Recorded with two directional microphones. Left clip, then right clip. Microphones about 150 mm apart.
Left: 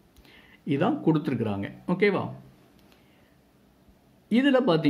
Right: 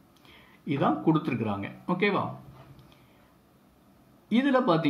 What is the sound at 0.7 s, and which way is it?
Speech, 40° left (ahead or behind).